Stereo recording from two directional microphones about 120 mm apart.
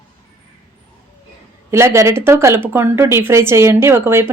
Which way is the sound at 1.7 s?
20° right (ahead or behind).